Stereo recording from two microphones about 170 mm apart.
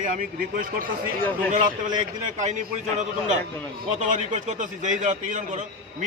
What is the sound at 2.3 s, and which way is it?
Speech, 45° right (ahead or behind).